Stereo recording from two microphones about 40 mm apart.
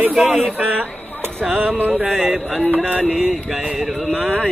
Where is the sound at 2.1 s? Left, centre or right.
Centre.